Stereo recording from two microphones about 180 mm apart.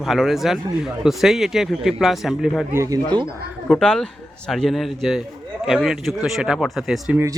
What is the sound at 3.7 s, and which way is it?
Speech, 5° left (ahead or behind).